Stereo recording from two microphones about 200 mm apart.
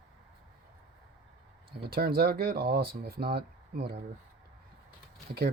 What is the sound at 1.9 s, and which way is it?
Speech, 50° right (ahead or behind).